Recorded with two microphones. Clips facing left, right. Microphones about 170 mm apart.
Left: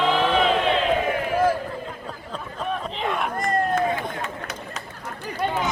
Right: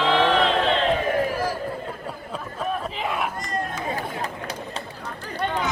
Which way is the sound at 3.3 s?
55° left (ahead or behind).